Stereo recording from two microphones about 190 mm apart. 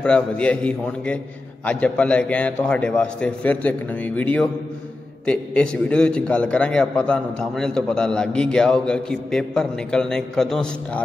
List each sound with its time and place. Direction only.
0.0 s a man's voice: 5° left (ahead or behind)